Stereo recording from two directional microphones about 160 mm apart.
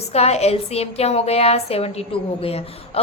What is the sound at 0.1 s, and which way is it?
A woman's voice, 40° left (ahead or behind).